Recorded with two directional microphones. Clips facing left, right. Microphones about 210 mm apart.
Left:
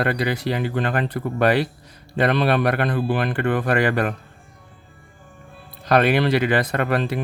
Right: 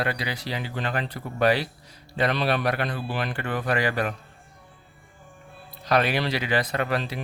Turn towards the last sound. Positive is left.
turn(degrees=55)  # may be behind; listen again after turning